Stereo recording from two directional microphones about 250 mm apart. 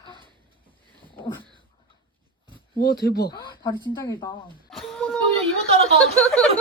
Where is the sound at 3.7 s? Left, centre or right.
Centre.